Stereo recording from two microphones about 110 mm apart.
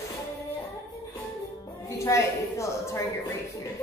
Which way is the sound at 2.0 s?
25° left (ahead or behind).